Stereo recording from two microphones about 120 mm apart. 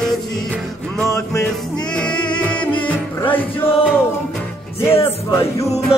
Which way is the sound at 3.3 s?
15° left (ahead or behind).